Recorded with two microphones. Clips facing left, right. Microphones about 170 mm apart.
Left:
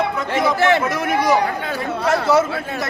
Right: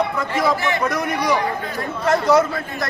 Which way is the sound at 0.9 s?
Centre (ahead or behind).